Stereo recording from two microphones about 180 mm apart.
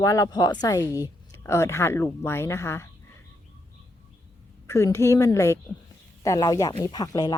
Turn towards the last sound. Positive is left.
turn(degrees=20)  # may be behind; listen again after turning